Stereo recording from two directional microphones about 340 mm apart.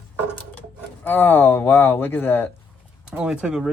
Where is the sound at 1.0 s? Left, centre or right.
Centre.